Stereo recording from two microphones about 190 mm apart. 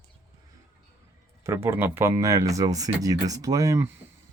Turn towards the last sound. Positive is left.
turn(degrees=-15)  # may be behind; listen again after turning